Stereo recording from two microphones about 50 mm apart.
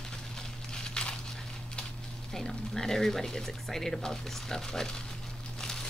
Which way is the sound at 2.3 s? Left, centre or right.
Centre.